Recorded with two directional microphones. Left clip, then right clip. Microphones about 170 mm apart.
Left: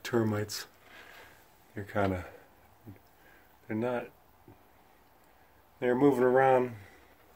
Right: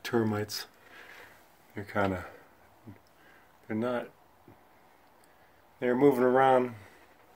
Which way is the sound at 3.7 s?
15° right (ahead or behind).